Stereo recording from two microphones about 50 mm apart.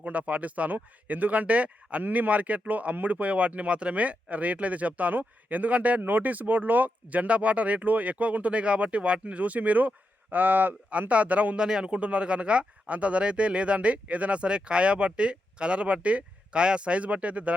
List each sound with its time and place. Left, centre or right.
0.0 s speech: right
11.1 s speech: right
11.6 s speech: centre